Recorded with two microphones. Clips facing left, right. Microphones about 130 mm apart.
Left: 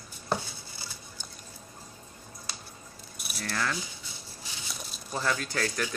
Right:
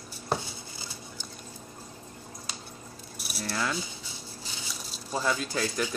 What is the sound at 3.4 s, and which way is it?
Speech, 15° right (ahead or behind).